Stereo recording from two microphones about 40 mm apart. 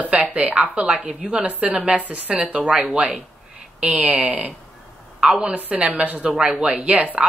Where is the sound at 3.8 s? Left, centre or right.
Right.